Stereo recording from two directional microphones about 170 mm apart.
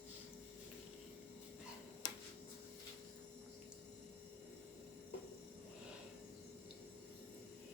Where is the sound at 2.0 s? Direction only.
25° left (ahead or behind).